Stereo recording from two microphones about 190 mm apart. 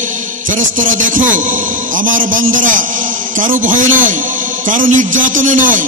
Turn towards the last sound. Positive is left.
turn(degrees=-45)  # may be behind; listen again after turning